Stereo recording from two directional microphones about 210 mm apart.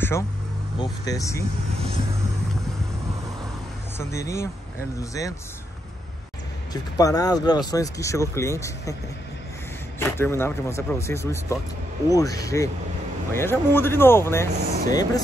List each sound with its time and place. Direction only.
1.0 s speech: 15° left (ahead or behind)
4.0 s speech: 15° left (ahead or behind)
6.7 s speech: 15° left (ahead or behind)
9.9 s speech: 10° left (ahead or behind)